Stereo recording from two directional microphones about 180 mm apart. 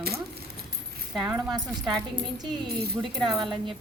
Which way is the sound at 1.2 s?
15° right (ahead or behind).